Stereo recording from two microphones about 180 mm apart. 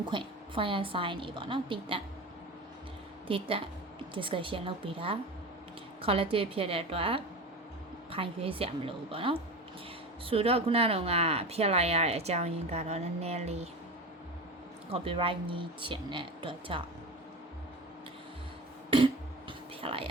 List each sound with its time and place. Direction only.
0.0 s speech: 25° right (ahead or behind)
3.2 s speech: 30° right (ahead or behind)
14.8 s speech: 30° right (ahead or behind)
18.9 s music: 30° right (ahead or behind)
19.8 s speech: 30° right (ahead or behind)